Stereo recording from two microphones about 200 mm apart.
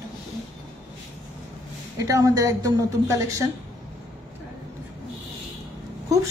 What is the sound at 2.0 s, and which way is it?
A woman's voice, 15° right (ahead or behind).